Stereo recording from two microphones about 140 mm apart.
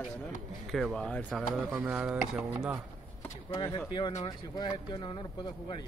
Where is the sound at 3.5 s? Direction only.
35° left (ahead or behind).